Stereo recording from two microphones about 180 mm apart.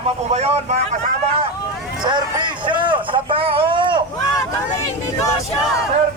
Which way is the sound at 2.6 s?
25° right (ahead or behind).